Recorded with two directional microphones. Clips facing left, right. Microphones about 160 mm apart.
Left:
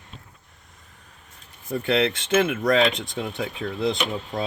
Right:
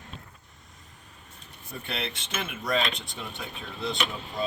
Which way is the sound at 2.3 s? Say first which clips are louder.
Left 9 dB; 70° left (ahead or behind).